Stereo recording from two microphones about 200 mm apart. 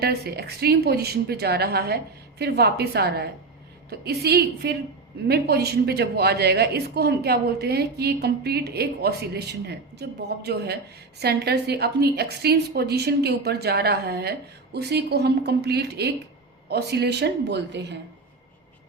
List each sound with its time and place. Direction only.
0.0 s a woman's voice: 55° right (ahead or behind)